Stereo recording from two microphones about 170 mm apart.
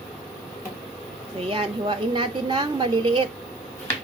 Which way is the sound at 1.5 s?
30° right (ahead or behind).